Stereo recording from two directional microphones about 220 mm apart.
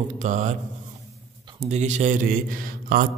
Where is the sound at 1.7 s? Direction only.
30° right (ahead or behind).